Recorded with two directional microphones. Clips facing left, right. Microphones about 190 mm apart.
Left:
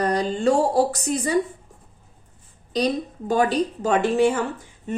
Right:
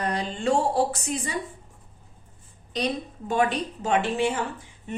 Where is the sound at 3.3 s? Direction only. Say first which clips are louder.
Left 4 dB; 35° left (ahead or behind).